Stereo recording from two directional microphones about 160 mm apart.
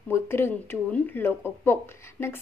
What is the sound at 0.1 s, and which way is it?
A woman's voice, 15° left (ahead or behind).